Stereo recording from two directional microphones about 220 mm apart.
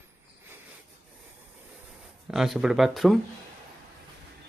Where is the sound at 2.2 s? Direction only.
Centre (ahead or behind).